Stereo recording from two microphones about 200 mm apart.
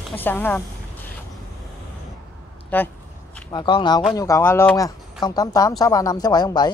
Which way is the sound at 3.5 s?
20° left (ahead or behind).